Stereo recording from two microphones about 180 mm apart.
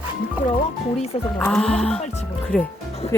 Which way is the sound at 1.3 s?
5° left (ahead or behind).